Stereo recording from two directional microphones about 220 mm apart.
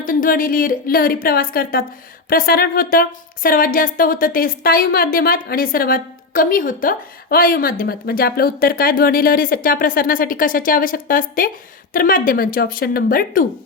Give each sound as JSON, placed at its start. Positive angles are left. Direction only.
{"t": 0.0, "sound": "speech", "side_deg": 40}